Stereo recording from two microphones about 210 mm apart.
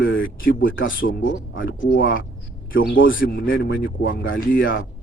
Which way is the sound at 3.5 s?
45° left (ahead or behind).